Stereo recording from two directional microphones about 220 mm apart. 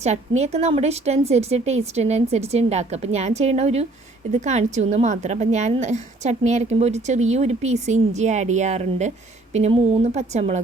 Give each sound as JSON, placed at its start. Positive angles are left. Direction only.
{"t": 0.0, "sound": "a woman's voice", "side_deg": -30}